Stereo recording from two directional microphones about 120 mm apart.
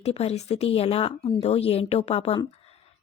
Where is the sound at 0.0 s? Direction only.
60° left (ahead or behind).